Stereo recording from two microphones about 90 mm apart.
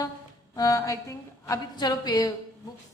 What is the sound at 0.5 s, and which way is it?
Speech, 40° left (ahead or behind).